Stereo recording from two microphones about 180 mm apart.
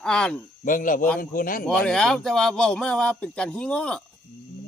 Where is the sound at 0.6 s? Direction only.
50° left (ahead or behind).